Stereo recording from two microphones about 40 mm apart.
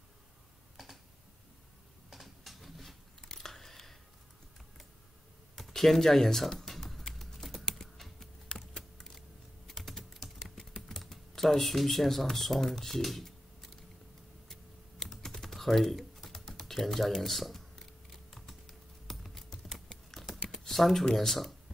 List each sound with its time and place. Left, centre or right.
2.1 s a sound: centre
5.6 s typing: centre
8.5 s typing: left
8.9 s power windows: centre
9.7 s typing: centre
10.6 s typing: centre
11.1 s speech: centre
14.5 s typing: centre
16.3 s music: centre
20.4 s computer keyboard: centre
21.0 s speech: centre